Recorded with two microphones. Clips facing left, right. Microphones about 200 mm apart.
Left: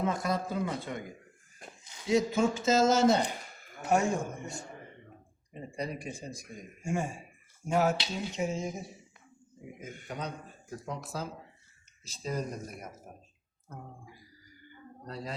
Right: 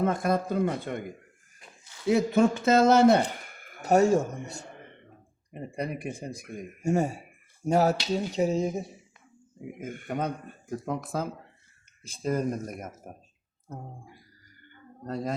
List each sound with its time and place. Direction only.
0.0 s a man's voice: 55° right (ahead or behind)
1.8 s a sound: 20° left (ahead or behind)
2.0 s speech: 60° right (ahead or behind)
3.8 s speech: 40° right (ahead or behind)
5.5 s a man's voice: 55° right (ahead or behind)
6.8 s speech: 40° right (ahead or behind)
9.7 s speech: 55° right (ahead or behind)
14.6 s a sound: 50° right (ahead or behind)